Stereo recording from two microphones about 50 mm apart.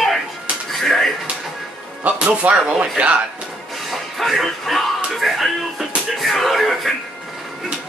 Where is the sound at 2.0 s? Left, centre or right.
Right.